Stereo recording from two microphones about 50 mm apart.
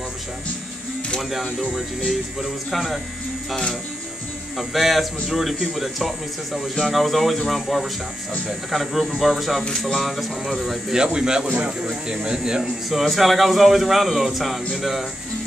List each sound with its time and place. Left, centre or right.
1.3 s speech: centre
4.6 s speech: centre
9.7 s speech: centre
9.9 s speech: centre
11.1 s a man's voice: centre
13.0 s speech: centre